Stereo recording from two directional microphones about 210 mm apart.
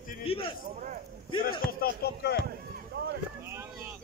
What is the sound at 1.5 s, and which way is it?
Speech, 45° left (ahead or behind).